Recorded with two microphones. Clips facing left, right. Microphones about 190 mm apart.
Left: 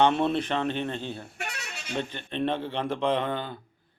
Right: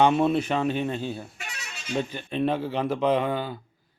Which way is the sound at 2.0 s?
10° right (ahead or behind).